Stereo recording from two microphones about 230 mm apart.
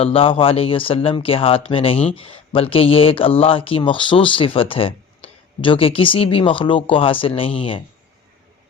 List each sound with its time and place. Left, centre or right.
0.0 s speech: left